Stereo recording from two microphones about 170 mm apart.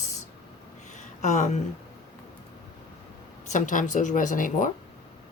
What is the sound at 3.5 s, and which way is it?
Speech, 50° left (ahead or behind).